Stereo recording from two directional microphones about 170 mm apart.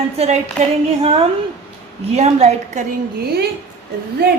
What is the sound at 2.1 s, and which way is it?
Speech, 40° right (ahead or behind).